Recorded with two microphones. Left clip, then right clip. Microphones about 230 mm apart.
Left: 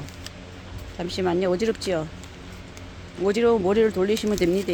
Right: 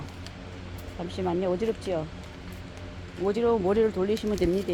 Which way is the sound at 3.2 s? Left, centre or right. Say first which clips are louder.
Left 4 dB; left.